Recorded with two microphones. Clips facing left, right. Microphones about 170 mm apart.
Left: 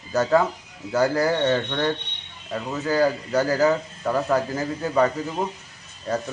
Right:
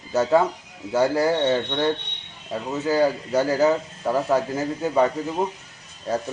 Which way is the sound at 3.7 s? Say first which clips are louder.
Right 1 dB; 10° right (ahead or behind).